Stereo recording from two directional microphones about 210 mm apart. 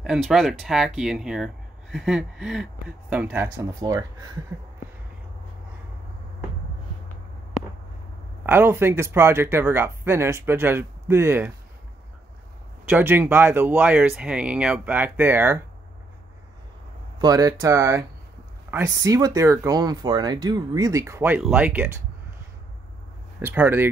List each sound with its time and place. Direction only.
0.0 s speech: centre (ahead or behind)
8.5 s speech: 10° right (ahead or behind)
12.9 s speech: 10° right (ahead or behind)
17.2 s speech: 15° right (ahead or behind)
23.4 s speech: 10° right (ahead or behind)